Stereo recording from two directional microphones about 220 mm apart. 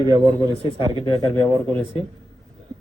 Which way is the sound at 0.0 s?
20° right (ahead or behind).